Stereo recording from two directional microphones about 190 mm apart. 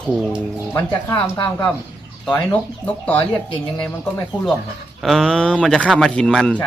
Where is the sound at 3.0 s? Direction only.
10° left (ahead or behind).